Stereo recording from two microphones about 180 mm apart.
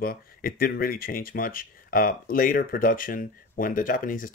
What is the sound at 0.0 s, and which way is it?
Speech, 55° left (ahead or behind).